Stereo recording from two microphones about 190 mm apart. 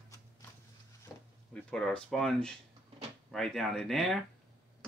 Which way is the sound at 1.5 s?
5° left (ahead or behind).